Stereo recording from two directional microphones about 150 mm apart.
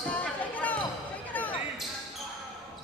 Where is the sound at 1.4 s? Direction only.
10° left (ahead or behind).